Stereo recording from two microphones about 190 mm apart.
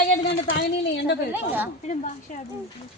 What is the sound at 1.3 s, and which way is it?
Speech, 10° right (ahead or behind).